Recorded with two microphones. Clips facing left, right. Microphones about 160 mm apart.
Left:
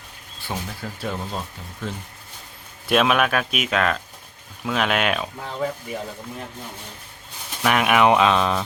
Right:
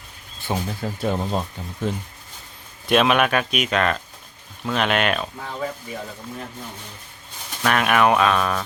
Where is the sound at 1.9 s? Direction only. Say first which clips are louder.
Right 6 dB; 15° right (ahead or behind).